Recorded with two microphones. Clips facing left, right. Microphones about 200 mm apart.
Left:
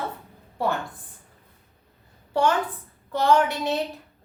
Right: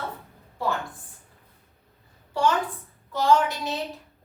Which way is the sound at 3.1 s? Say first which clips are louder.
Left 1 dB; 60° left (ahead or behind).